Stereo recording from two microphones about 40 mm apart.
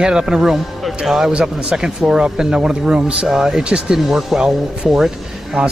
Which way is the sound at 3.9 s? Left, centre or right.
Centre.